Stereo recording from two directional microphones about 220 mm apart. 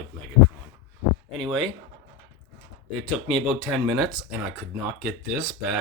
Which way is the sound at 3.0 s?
Centre (ahead or behind).